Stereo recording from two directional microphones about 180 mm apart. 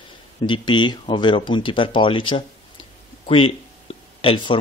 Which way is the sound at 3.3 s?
30° left (ahead or behind).